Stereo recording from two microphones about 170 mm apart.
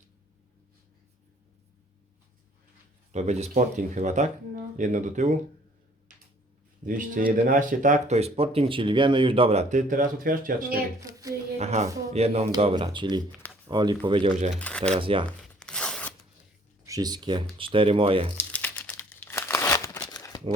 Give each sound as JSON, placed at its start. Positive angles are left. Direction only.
{"t": 3.1, "sound": "speech", "side_deg": -40}
{"t": 6.8, "sound": "speech", "side_deg": -50}
{"t": 11.0, "sound": "speech", "side_deg": -20}
{"t": 11.5, "sound": "speech", "side_deg": -40}
{"t": 14.6, "sound": "speech", "side_deg": 5}
{"t": 14.9, "sound": "speech", "side_deg": -30}
{"t": 15.3, "sound": "a sound", "side_deg": 5}
{"t": 16.8, "sound": "speech", "side_deg": -20}
{"t": 18.5, "sound": "crumpling", "side_deg": 10}
{"t": 20.1, "sound": "a sound", "side_deg": 20}